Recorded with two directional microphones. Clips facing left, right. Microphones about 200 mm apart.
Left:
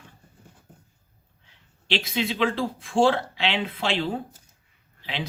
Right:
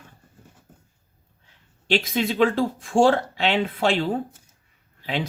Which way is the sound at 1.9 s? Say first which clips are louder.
Right 4 dB; 45° right (ahead or behind).